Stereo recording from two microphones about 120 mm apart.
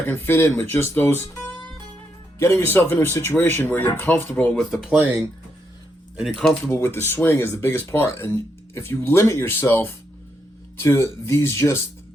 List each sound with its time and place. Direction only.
0.0 s speech: 15° left (ahead or behind)
2.4 s speech: 20° left (ahead or behind)
4.7 s speech: centre (ahead or behind)
4.9 s speech: 20° right (ahead or behind)
6.1 s speech: centre (ahead or behind)
6.7 s speech: 20° left (ahead or behind)